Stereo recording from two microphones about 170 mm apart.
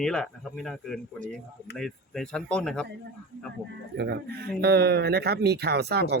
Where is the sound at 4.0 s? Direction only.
75° right (ahead or behind).